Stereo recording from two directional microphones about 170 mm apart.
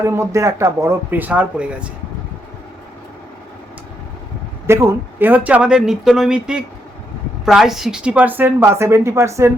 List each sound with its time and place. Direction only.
0.0 s a woman's voice: 15° right (ahead or behind)
4.6 s a woman's voice: 15° right (ahead or behind)